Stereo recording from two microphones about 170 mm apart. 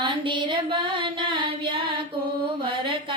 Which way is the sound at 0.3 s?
30° right (ahead or behind).